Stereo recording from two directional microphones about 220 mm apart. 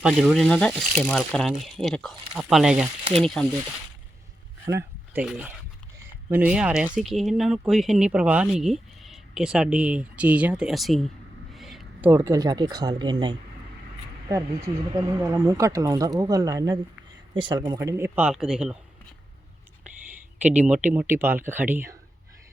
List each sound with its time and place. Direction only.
0.0 s speech: centre (ahead or behind)
5.1 s speech: 5° right (ahead or behind)
20.4 s speech: 5° right (ahead or behind)